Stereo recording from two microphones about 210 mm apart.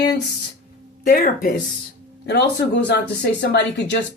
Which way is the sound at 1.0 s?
40° left (ahead or behind).